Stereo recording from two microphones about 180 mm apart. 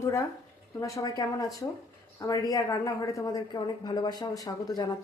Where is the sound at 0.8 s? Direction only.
20° left (ahead or behind).